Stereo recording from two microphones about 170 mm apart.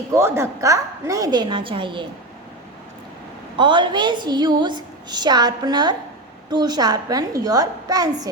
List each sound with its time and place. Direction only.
0.1 s a woman's voice: 15° right (ahead or behind)
3.6 s a woman's voice: 30° right (ahead or behind)